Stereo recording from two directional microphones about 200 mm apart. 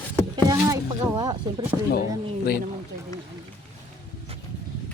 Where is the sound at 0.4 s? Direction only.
15° right (ahead or behind).